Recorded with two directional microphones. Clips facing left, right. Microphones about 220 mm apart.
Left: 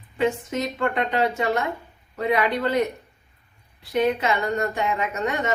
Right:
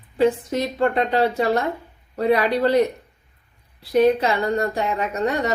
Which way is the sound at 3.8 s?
35° right (ahead or behind).